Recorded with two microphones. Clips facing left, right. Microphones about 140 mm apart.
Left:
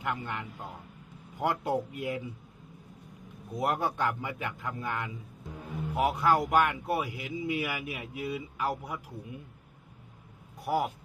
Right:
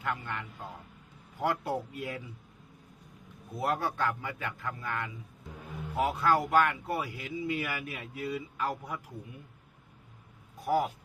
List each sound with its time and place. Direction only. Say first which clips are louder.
0.0 s speech: left 1 dB; 15° left (ahead or behind)
3.5 s speech: left 2 dB; 15° left (ahead or behind)
10.6 s speech: right 1 dB; 10° left (ahead or behind)